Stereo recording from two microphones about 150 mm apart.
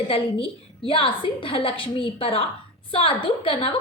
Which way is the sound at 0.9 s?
35° left (ahead or behind).